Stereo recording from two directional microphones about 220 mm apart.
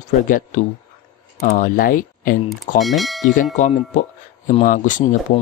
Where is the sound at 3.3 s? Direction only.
35° left (ahead or behind).